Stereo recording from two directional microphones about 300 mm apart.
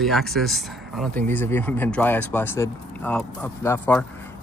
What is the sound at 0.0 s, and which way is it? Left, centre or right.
Speech, centre.